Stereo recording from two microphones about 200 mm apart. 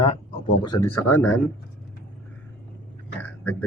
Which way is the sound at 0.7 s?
15° left (ahead or behind).